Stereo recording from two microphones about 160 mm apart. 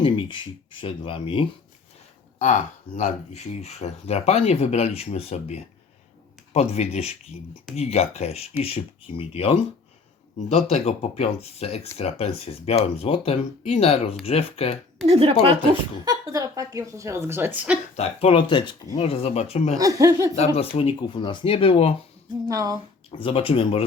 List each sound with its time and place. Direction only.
0.0 s speech: 30° left (ahead or behind)
2.4 s speech: 50° left (ahead or behind)
15.0 s speech: 35° right (ahead or behind)
16.0 s speech: 20° right (ahead or behind)
17.9 s speech: 40° left (ahead or behind)
19.8 s speech: 20° right (ahead or behind)
20.3 s speech: 40° left (ahead or behind)
22.4 s speech: 20° right (ahead or behind)
23.2 s speech: 35° left (ahead or behind)